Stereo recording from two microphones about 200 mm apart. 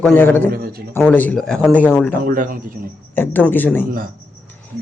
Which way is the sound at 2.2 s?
45° right (ahead or behind).